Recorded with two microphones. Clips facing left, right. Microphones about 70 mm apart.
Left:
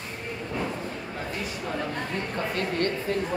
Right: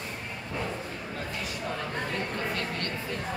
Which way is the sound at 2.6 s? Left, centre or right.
Left.